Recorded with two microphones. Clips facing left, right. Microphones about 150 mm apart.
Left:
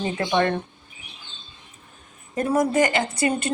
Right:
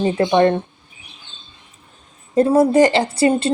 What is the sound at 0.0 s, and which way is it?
Speech, 25° right (ahead or behind).